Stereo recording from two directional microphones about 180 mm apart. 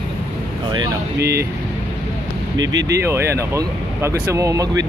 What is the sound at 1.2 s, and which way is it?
Speech, 65° right (ahead or behind).